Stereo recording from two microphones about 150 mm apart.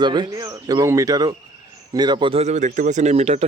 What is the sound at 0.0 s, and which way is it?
A man's voice, 30° right (ahead or behind).